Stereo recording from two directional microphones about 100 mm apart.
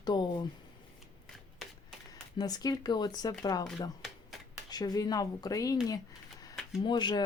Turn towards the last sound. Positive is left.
turn(degrees=50)  # may be behind; listen again after turning